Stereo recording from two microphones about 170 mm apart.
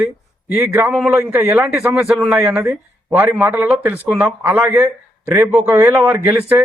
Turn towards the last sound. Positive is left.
turn(degrees=-10)  # may be behind; listen again after turning